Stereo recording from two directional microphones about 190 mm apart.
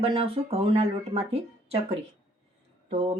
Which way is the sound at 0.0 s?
30° right (ahead or behind).